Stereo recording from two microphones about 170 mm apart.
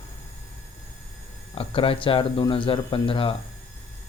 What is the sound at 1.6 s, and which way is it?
Speech, 30° left (ahead or behind).